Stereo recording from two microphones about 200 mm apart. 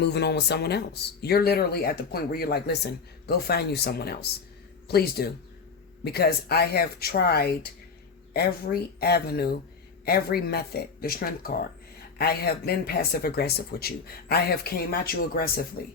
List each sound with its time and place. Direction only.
0.0 s speech: 55° left (ahead or behind)